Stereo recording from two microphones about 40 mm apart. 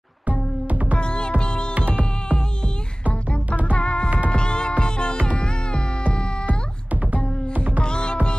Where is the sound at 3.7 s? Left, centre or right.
Left.